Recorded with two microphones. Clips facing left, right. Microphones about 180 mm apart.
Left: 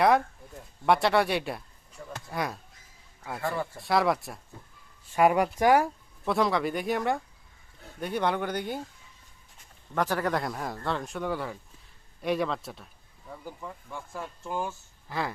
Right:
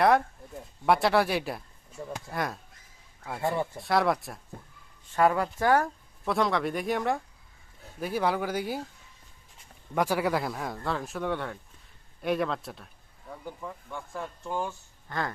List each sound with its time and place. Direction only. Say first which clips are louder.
0.9 s speech: even; centre (ahead or behind)
2.0 s speech: right 5 dB; 30° right (ahead or behind)
2.3 s speech: left 1 dB; centre (ahead or behind)
3.4 s speech: right 3 dB; 20° right (ahead or behind)
3.8 s speech: left 2 dB; centre (ahead or behind)
5.0 s speech: left 2 dB; 15° left (ahead or behind)
6.2 s speech: left 1 dB; centre (ahead or behind)
9.9 s speech: right 1 dB; 10° right (ahead or behind); by 15.2 s 5° left (ahead or behind)